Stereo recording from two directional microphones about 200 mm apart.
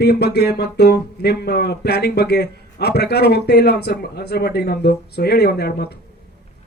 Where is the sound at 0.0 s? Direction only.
55° left (ahead or behind).